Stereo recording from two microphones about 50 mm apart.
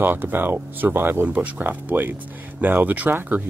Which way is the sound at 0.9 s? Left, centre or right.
Right.